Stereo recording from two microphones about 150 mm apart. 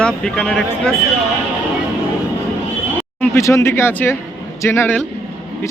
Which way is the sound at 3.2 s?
20° left (ahead or behind).